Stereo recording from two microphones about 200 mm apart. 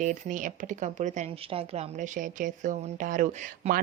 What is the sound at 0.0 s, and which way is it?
Speech, 40° right (ahead or behind).